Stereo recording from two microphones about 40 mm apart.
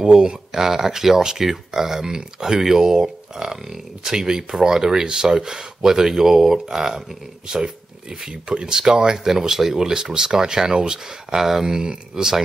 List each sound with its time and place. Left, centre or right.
0.0 s speech: right
0.5 s speech: centre